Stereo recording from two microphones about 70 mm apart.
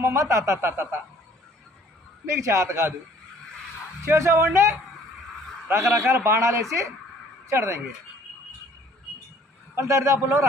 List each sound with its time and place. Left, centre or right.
0.0 s a man's voice: right
2.2 s a man's voice: right
4.0 s a man's voice: right
5.7 s a man's voice: right
9.8 s a man's voice: right